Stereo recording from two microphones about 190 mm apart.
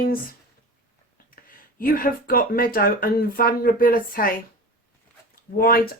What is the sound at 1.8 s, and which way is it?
Speech, 50° left (ahead or behind).